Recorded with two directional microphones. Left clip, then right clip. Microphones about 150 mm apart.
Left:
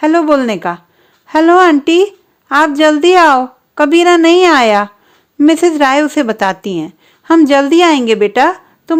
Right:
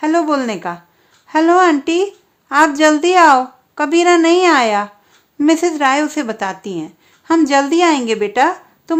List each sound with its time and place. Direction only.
0.0 s a woman's voice: 30° left (ahead or behind)